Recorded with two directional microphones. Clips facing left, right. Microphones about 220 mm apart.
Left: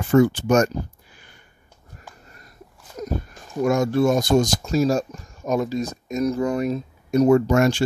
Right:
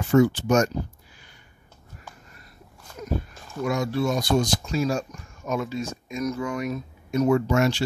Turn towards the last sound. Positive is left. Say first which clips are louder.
# left 4 dB
turn(degrees=50)  # may be behind; listen again after turning